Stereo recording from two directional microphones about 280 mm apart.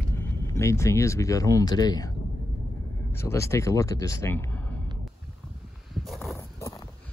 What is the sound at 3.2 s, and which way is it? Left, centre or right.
Speech, centre.